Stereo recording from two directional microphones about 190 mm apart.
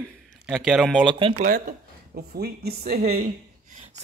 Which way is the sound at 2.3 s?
55° right (ahead or behind).